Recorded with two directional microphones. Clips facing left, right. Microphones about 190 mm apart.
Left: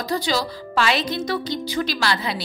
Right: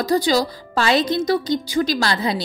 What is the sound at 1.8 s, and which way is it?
Speech, 30° right (ahead or behind).